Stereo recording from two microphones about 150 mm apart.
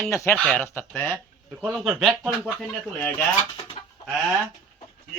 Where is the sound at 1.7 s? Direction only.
5° right (ahead or behind).